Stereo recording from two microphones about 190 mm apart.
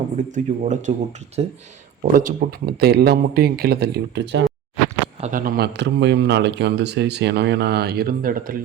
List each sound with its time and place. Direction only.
0.2 s speech: 40° right (ahead or behind)
2.1 s speech: 50° right (ahead or behind)
5.2 s speech: 45° right (ahead or behind)